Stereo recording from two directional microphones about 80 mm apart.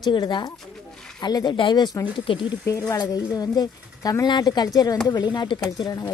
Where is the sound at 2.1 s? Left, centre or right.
Left.